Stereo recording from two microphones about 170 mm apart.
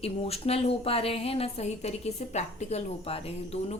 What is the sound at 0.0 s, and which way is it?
A woman's voice, 35° left (ahead or behind).